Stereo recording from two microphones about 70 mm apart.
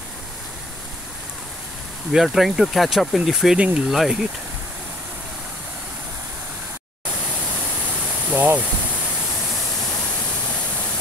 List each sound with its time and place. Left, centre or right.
2.1 s speech: centre
3.9 s speech: centre
8.3 s speech: right